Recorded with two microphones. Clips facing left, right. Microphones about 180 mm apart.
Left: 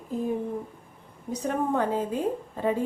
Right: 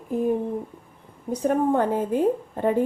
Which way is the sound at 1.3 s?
50° right (ahead or behind).